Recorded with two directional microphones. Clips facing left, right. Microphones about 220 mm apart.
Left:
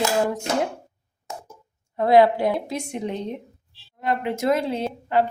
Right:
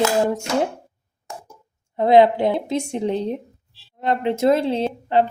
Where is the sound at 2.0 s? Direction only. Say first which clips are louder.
Right 2 dB; 20° right (ahead or behind).